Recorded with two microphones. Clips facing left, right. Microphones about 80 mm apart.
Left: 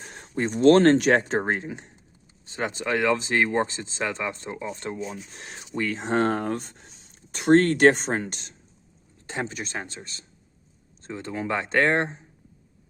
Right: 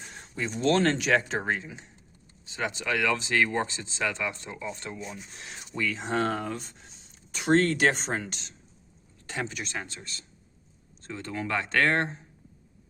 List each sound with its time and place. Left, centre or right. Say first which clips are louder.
0.0 s speech: left 6 dB; left
9.2 s speech: left 3 dB; left